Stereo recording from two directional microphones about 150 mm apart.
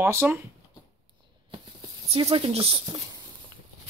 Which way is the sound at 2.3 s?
40° right (ahead or behind).